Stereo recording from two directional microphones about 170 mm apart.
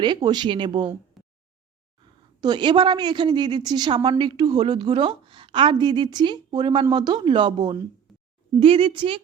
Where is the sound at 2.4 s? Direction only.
25° right (ahead or behind).